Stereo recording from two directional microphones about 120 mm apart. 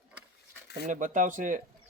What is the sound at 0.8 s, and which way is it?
Speech, 90° right.